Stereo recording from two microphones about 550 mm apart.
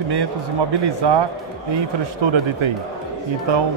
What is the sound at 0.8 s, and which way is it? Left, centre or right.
Speech, right.